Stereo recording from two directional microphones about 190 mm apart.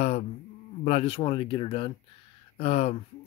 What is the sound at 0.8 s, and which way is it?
Speech, 30° left (ahead or behind).